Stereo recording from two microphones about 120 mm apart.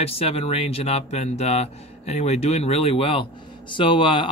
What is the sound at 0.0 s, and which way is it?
Speech, 55° left (ahead or behind).